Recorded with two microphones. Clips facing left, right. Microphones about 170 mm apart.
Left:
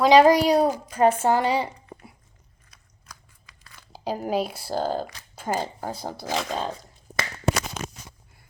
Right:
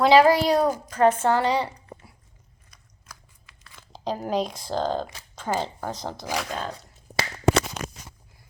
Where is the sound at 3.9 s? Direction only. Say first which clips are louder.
Even; 10° left (ahead or behind).